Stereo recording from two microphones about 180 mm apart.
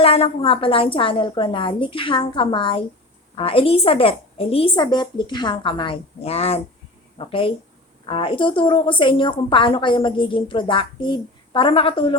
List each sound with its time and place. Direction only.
0.0 s a woman's voice: 30° left (ahead or behind)